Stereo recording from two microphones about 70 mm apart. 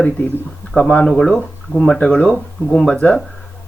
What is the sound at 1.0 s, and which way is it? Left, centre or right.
Speech, centre.